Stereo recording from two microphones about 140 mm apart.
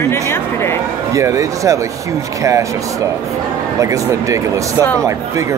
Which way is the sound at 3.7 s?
25° right (ahead or behind).